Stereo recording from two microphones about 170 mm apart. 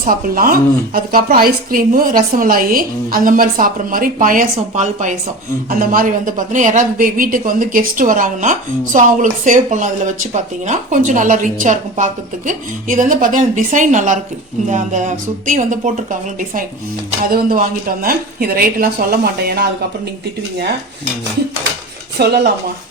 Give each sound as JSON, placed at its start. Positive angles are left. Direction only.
{"t": 0.0, "sound": "a woman's voice", "side_deg": -55}
{"t": 5.8, "sound": "a woman's voice", "side_deg": -55}
{"t": 17.3, "sound": "a woman's voice", "side_deg": -55}
{"t": 22.2, "sound": "speech", "side_deg": -70}